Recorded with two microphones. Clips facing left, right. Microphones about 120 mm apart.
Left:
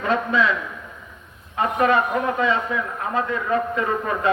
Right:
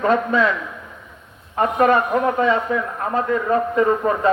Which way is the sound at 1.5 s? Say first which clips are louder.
Right 3 dB; 40° right (ahead or behind).